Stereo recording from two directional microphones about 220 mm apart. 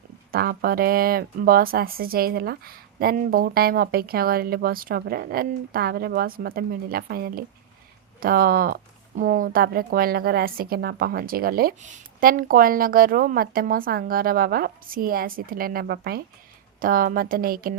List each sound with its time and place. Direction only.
0.3 s speech: 45° right (ahead or behind)